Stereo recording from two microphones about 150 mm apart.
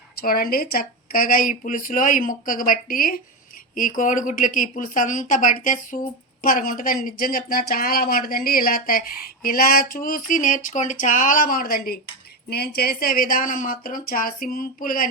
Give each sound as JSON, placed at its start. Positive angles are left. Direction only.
{"t": 0.2, "sound": "a woman's voice", "side_deg": 75}
{"t": 12.5, "sound": "speech", "side_deg": 90}